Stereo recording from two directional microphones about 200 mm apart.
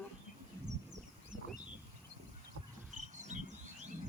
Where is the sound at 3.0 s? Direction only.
35° right (ahead or behind).